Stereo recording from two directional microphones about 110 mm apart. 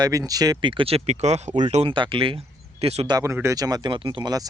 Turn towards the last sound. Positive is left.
turn(degrees=-35)  # may be behind; listen again after turning